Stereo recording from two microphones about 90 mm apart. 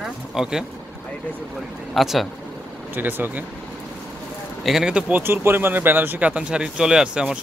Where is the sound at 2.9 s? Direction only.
20° right (ahead or behind).